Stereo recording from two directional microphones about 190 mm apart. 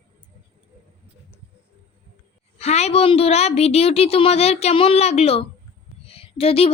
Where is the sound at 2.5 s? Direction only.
35° left (ahead or behind).